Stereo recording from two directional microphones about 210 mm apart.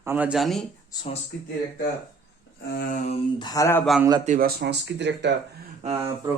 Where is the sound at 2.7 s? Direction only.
40° left (ahead or behind).